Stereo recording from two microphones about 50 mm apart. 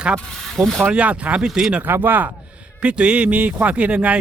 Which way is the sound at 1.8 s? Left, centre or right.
Right.